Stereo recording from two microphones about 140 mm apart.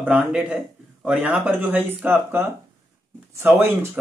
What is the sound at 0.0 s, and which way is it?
Speech, 5° right (ahead or behind).